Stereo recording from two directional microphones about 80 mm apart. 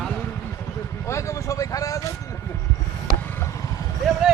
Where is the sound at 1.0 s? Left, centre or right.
Left.